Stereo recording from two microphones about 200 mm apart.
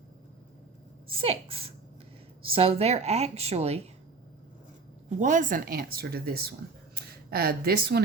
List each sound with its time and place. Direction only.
1.0 s a woman's voice: 30° right (ahead or behind)
5.0 s speech: 40° right (ahead or behind)